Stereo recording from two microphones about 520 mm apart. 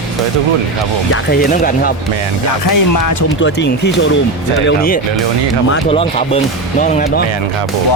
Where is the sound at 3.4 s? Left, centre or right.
Left.